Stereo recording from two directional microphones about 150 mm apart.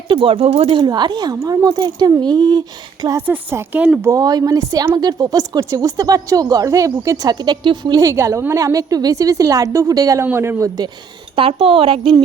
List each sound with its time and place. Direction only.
0.1 s a man's voice: 40° right (ahead or behind); by 10.7 s 15° right (ahead or behind)
11.3 s a woman's voice: 40° right (ahead or behind)